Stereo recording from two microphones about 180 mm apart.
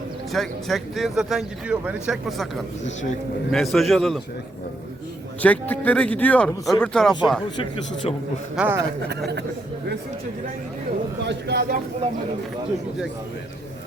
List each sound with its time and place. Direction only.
0.3 s speech: centre (ahead or behind)
3.5 s speech: centre (ahead or behind)
5.4 s a man's voice: 10° left (ahead or behind)
7.5 s speech: 30° left (ahead or behind)
8.5 s a man's voice: 10° right (ahead or behind)
9.0 s a man's voice: 70° right (ahead or behind)
11.3 s a man's voice: 65° right (ahead or behind)